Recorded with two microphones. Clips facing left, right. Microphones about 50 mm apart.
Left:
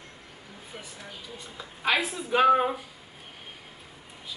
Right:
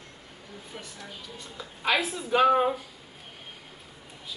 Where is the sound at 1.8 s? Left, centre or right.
Centre.